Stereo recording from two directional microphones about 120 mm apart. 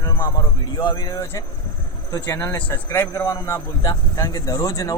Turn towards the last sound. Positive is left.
turn(degrees=25)  # may be behind; listen again after turning